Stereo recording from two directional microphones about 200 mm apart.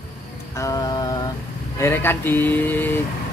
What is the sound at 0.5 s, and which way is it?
Speech, 15° left (ahead or behind).